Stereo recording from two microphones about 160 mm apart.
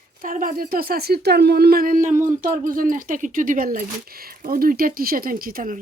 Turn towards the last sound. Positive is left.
turn(degrees=-60)  # may be behind; listen again after turning